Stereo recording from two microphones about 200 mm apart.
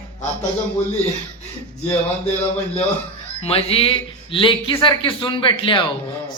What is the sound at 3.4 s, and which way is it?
A man's voice, 30° left (ahead or behind).